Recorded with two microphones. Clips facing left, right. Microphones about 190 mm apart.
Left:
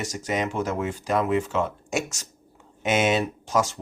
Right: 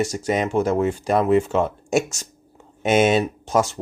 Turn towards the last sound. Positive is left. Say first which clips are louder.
# right 4 dB
turn(degrees=-25)  # may be behind; listen again after turning